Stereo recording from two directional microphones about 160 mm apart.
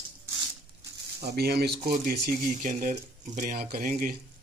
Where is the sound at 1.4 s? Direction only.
80° right.